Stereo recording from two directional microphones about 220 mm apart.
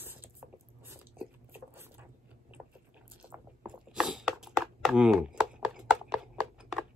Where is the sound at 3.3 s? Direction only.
5° right (ahead or behind).